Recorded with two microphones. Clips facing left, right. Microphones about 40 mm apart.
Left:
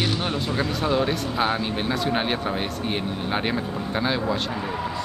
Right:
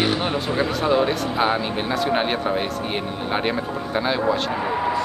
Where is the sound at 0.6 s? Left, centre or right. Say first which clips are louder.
Right 4 dB; centre.